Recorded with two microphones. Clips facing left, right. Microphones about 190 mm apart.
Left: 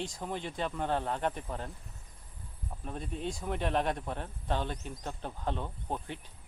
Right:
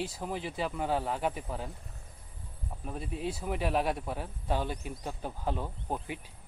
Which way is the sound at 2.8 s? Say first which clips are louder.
Right 1 dB; 5° right (ahead or behind).